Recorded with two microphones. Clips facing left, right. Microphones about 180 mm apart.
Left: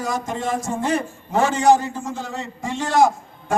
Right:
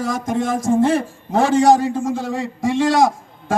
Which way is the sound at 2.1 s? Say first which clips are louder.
Right 7 dB; 90° right.